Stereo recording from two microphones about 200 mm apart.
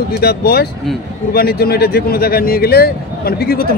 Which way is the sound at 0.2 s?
50° left (ahead or behind).